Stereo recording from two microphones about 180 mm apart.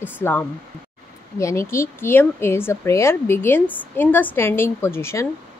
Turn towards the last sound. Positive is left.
turn(degrees=15)  # may be behind; listen again after turning